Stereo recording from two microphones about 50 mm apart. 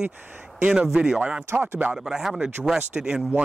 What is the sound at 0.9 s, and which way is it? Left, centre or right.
Speech, centre.